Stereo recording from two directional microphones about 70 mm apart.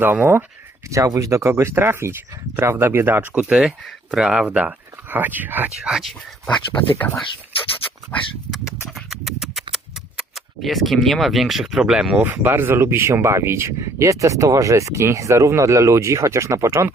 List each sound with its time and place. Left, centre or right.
0.0 s speech: right
0.9 s speech: right
3.6 s speech: centre
4.4 s speech: right
5.8 s speech: centre
6.7 s speech: left
8.1 s dog: left
8.5 s horse: centre
12.2 s speech: right